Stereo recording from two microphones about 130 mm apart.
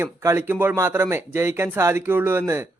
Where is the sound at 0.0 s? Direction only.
20° right (ahead or behind).